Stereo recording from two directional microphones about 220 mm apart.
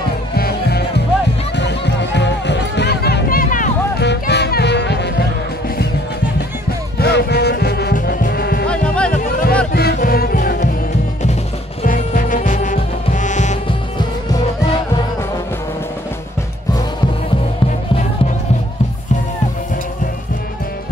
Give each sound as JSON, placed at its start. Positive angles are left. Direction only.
{"t": 0.4, "sound": "music", "side_deg": 45}
{"t": 4.0, "sound": "music", "side_deg": 50}
{"t": 7.0, "sound": "music", "side_deg": 50}
{"t": 8.6, "sound": "music", "side_deg": 5}
{"t": 9.1, "sound": "music", "side_deg": 40}
{"t": 11.8, "sound": "music", "side_deg": 40}